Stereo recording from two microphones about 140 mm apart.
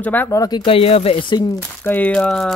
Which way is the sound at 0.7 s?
45° left (ahead or behind).